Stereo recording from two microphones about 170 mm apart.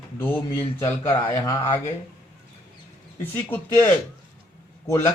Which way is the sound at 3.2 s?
15° left (ahead or behind).